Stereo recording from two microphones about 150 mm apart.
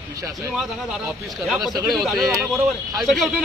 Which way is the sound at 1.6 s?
25° right (ahead or behind).